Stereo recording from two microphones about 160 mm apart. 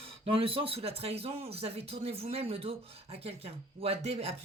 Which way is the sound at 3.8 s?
40° right (ahead or behind).